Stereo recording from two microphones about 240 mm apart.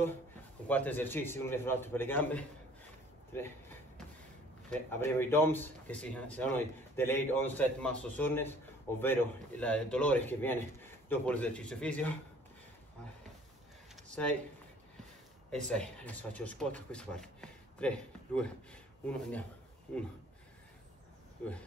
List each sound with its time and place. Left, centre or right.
0.7 s a man's voice: centre
15.5 s a man's voice: centre